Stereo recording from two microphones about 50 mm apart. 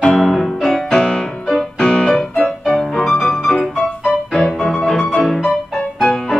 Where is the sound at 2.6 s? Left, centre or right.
Centre.